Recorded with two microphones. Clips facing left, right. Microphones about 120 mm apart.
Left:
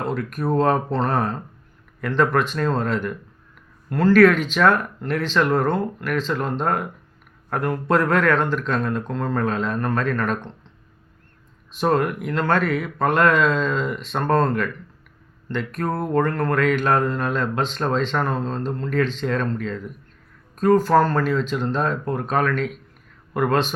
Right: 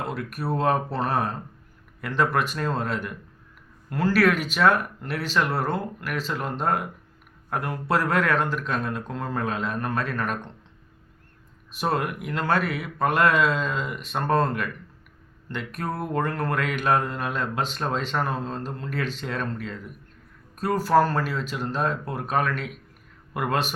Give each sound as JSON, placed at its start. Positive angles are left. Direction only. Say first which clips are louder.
{"t": 0.1, "sound": "speech", "louder": "left 6 dB", "side_deg": -10}
{"t": 11.7, "sound": "speech", "louder": "left 6 dB", "side_deg": -10}